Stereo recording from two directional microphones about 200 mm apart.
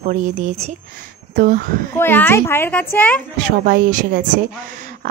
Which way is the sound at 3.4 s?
45° right (ahead or behind).